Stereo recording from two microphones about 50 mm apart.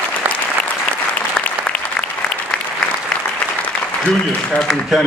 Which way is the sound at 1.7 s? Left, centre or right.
Left.